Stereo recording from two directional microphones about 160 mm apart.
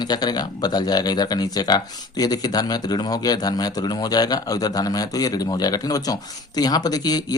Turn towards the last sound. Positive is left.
turn(degrees=25)  # may be behind; listen again after turning